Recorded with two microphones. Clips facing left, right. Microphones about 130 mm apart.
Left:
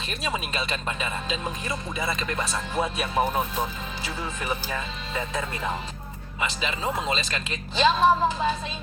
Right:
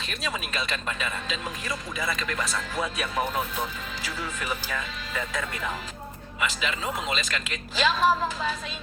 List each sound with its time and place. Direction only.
0.3 s speech: 25° left (ahead or behind)